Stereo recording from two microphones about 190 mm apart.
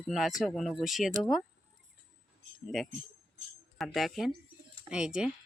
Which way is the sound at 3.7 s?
Centre (ahead or behind).